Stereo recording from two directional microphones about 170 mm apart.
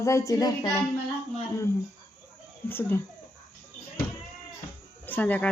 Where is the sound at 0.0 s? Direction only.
15° left (ahead or behind).